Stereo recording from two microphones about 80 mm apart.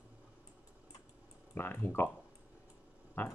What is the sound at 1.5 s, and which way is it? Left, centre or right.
Speech, left.